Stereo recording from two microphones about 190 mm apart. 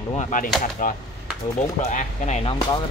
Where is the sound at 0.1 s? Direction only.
40° left (ahead or behind).